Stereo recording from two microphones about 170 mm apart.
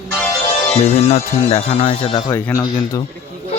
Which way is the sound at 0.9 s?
35° left (ahead or behind).